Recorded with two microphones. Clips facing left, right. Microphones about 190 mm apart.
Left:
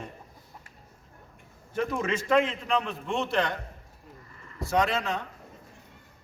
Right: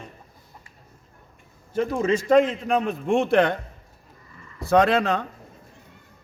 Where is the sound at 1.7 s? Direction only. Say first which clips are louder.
Right 6 dB; 30° right (ahead or behind); by 3.6 s 55° right (ahead or behind).